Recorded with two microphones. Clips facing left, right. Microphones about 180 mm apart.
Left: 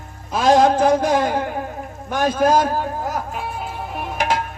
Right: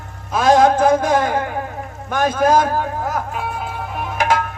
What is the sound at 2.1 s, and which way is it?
Speech, 50° right (ahead or behind).